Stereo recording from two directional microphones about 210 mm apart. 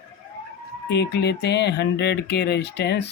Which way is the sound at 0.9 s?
55° left (ahead or behind).